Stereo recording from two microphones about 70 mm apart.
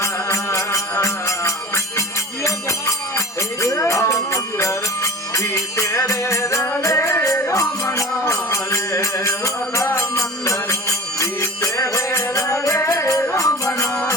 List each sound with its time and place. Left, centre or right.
0.0 s music: left